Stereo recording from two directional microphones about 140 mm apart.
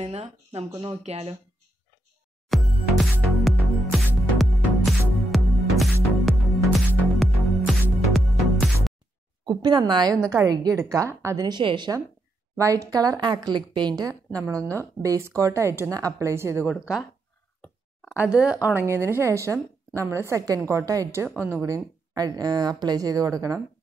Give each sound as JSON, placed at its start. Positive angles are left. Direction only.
{"t": 0.0, "sound": "speech", "side_deg": -45}
{"t": 2.5, "sound": "music", "side_deg": 0}
{"t": 9.5, "sound": "a woman's voice", "side_deg": -30}
{"t": 12.5, "sound": "a woman's voice", "side_deg": -25}
{"t": 16.8, "sound": "speech", "side_deg": -5}
{"t": 18.1, "sound": "speech", "side_deg": -10}
{"t": 18.8, "sound": "a woman's voice", "side_deg": -15}